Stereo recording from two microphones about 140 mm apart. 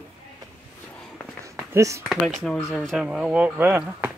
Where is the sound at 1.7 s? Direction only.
20° right (ahead or behind).